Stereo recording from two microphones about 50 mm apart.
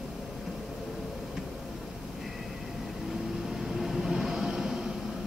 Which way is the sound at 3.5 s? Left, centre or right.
Centre.